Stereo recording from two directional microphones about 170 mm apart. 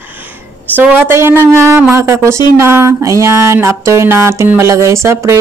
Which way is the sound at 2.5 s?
15° right (ahead or behind).